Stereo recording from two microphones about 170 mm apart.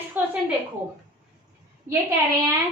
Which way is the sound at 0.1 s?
10° right (ahead or behind).